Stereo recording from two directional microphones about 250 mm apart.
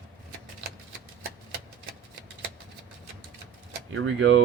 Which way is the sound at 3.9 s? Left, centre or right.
Right.